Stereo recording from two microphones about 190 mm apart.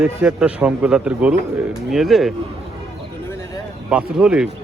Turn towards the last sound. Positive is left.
turn(degrees=-5)  # may be behind; listen again after turning